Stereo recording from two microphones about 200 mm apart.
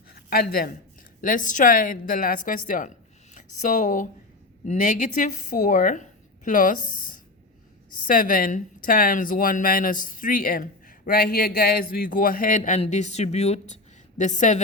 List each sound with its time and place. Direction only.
0.1 s a sound: 50° left (ahead or behind)
1.2 s a woman's voice: 40° left (ahead or behind)
8.0 s a woman's voice: 45° left (ahead or behind)